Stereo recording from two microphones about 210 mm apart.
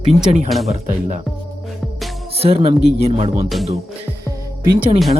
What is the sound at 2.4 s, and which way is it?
Speech, 30° right (ahead or behind).